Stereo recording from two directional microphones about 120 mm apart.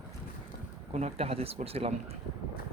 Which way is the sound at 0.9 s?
65° right (ahead or behind).